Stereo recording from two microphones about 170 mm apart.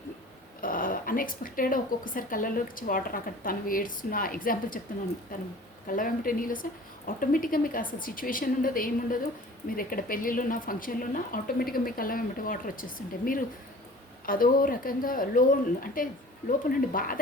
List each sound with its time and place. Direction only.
0.6 s a woman's voice: 55° left (ahead or behind)
14.3 s a woman's voice: 55° left (ahead or behind)